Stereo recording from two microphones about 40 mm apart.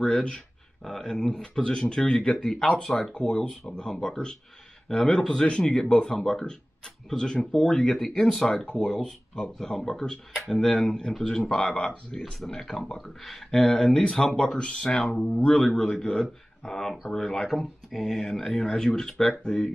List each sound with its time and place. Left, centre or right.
0.0 s speech: centre
2.9 s speech: left
3.8 s speech: centre
19.4 s speech: left